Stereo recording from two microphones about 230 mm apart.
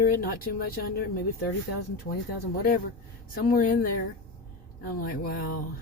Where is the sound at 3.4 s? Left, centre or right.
Left.